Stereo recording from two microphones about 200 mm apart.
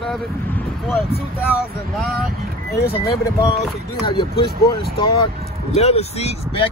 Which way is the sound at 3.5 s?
25° left (ahead or behind).